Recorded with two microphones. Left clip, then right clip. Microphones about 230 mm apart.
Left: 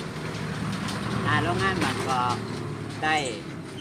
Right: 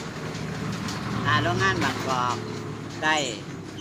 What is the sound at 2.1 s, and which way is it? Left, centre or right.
Speech, right.